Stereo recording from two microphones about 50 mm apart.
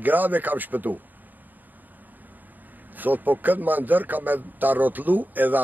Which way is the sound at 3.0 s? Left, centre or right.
Right.